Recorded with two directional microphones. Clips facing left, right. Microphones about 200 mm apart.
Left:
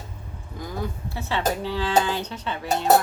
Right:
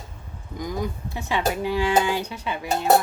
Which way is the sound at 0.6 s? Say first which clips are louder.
Right 3 dB; 15° right (ahead or behind).